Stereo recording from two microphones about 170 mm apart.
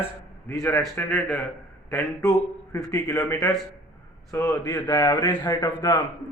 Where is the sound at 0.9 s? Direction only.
15° left (ahead or behind).